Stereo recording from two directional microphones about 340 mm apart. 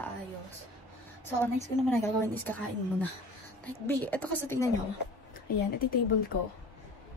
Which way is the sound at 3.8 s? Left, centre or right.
Centre.